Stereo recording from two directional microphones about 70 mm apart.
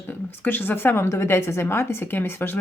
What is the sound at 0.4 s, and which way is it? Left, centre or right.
A woman's voice, left.